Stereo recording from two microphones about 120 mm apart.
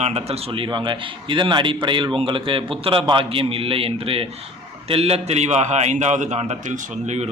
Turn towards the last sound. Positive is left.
turn(degrees=-70)  # may be behind; listen again after turning